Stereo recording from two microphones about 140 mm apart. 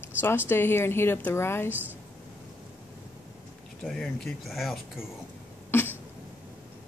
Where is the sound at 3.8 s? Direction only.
5° left (ahead or behind).